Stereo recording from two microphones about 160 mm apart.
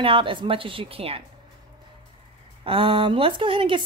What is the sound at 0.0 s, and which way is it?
A woman's voice, 30° right (ahead or behind).